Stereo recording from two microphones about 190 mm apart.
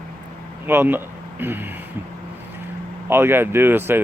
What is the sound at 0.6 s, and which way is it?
Speech, 10° right (ahead or behind).